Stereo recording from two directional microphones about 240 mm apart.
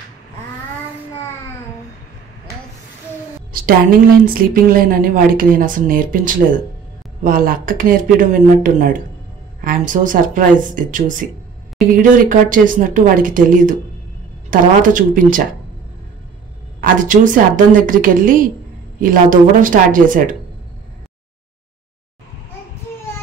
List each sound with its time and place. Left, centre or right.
4.3 s speech: right
16.8 s speech: right